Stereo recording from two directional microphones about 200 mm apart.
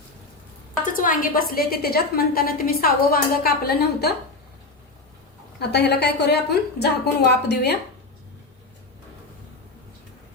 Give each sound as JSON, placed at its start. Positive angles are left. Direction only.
{"t": 0.9, "sound": "a woman's voice", "side_deg": 45}
{"t": 5.5, "sound": "a woman's voice", "side_deg": 55}